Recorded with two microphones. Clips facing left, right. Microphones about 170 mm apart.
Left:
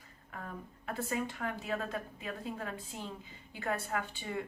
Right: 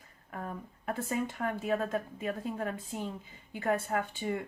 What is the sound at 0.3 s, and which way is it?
A woman's voice, 40° right (ahead or behind).